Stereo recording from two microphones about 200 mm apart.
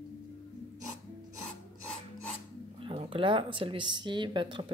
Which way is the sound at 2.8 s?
25° right (ahead or behind).